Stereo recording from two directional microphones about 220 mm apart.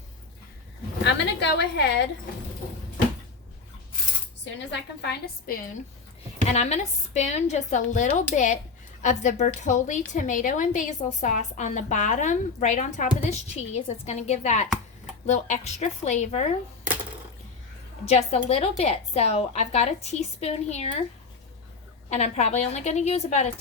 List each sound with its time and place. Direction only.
1.0 s a woman's voice: 50° left (ahead or behind)
4.7 s a woman's voice: 45° left (ahead or behind)
6.5 s a woman's voice: 30° left (ahead or behind)
18.0 s a woman's voice: 25° left (ahead or behind)
22.1 s a woman's voice: 30° left (ahead or behind)